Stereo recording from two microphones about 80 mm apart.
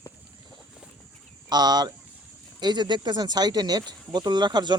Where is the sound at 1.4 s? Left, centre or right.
Right.